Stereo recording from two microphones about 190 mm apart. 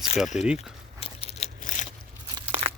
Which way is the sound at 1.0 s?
30° left (ahead or behind).